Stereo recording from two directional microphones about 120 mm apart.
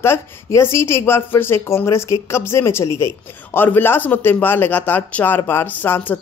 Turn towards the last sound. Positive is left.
turn(degrees=15)  # may be behind; listen again after turning